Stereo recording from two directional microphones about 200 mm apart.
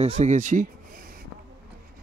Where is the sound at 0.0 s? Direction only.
35° right (ahead or behind).